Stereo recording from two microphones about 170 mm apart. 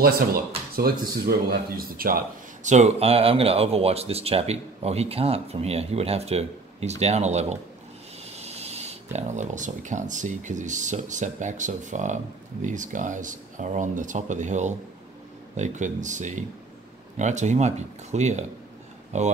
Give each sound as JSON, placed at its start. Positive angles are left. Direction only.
{"t": 0.7, "sound": "speech", "side_deg": -65}